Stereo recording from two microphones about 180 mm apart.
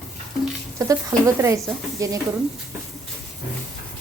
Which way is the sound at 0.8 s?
20° right (ahead or behind).